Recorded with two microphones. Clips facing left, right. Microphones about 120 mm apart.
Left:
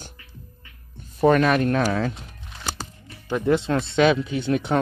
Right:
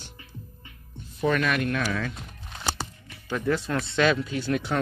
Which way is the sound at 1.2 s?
40° left (ahead or behind).